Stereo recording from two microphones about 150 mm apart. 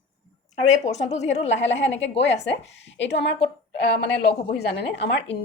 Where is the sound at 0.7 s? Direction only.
50° left (ahead or behind).